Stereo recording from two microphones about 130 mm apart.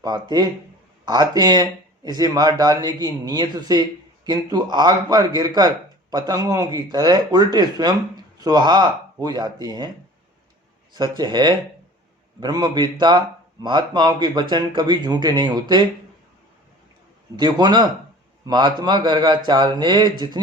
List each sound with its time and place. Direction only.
0.0 s speech: 30° right (ahead or behind)
10.9 s speech: 35° right (ahead or behind)
17.3 s speech: 30° right (ahead or behind)